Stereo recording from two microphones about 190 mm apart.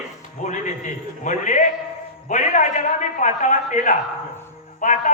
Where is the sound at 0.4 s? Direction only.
40° left (ahead or behind).